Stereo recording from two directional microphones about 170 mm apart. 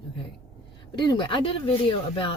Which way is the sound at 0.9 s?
25° left (ahead or behind).